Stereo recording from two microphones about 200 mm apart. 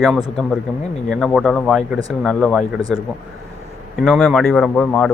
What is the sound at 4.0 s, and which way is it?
Speech, centre (ahead or behind).